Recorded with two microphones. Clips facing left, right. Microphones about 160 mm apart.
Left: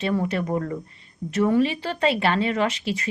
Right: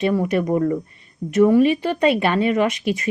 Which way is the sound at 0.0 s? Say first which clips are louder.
Right 5 dB; 15° right (ahead or behind).